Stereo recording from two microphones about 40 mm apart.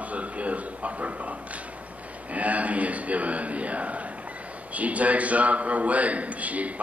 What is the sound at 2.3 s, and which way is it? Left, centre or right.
A man's voice, right.